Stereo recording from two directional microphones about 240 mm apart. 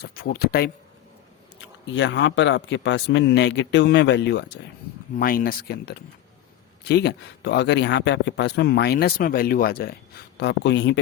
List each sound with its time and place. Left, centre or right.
0.0 s speech: left
1.9 s speech: left